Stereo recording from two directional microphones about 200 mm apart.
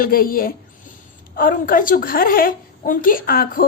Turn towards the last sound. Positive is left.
turn(degrees=45)  # may be behind; listen again after turning